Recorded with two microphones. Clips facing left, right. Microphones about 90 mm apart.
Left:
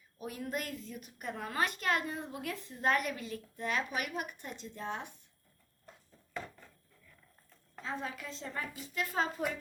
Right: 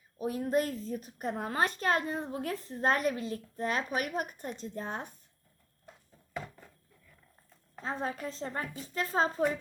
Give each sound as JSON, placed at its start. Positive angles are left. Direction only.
{"t": 0.2, "sound": "a woman's voice", "side_deg": -35}
{"t": 7.8, "sound": "a woman's voice", "side_deg": -40}